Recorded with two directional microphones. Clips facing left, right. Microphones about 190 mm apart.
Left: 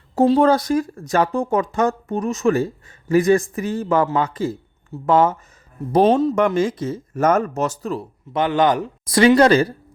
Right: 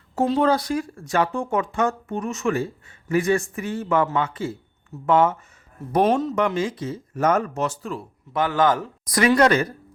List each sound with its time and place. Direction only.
0.2 s speech: 40° left (ahead or behind)
6.3 s speech: 45° left (ahead or behind)
8.3 s speech: 20° left (ahead or behind)